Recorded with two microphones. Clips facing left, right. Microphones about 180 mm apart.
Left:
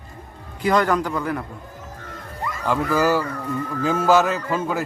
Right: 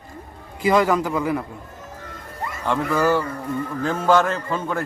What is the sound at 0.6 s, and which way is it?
Speech, 5° right (ahead or behind).